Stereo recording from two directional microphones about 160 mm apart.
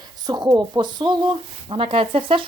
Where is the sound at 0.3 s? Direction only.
25° right (ahead or behind).